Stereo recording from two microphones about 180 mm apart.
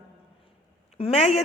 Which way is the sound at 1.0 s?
35° left (ahead or behind).